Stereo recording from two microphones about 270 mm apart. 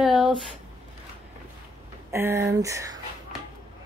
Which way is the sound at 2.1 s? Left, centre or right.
Centre.